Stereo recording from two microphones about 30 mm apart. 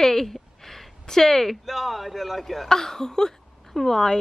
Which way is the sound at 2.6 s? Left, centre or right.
Centre.